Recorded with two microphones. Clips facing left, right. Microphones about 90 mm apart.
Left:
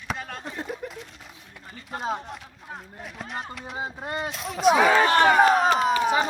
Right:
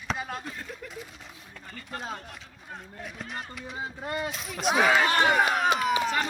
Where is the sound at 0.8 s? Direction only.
25° left (ahead or behind).